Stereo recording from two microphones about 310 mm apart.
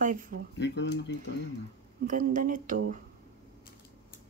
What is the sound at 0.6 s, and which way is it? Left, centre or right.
Speech, left.